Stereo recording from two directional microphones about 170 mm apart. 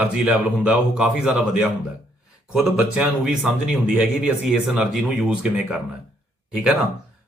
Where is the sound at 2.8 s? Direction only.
5° right (ahead or behind).